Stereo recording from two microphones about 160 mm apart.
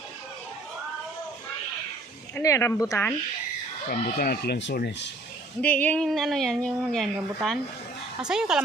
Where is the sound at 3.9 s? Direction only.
65° left (ahead or behind); by 5.1 s 90° left.